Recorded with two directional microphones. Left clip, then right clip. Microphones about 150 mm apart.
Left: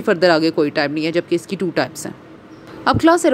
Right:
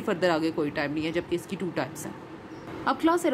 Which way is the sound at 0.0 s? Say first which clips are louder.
Left 11 dB; 40° left (ahead or behind).